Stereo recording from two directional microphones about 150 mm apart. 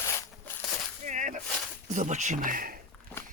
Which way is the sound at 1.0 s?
55° right (ahead or behind).